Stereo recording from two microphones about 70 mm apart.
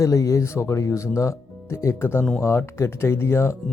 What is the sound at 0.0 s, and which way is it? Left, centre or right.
Speech, left.